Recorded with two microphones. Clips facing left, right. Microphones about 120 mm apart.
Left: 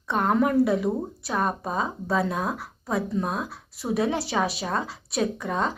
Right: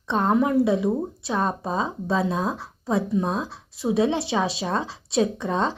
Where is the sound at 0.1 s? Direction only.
25° right (ahead or behind).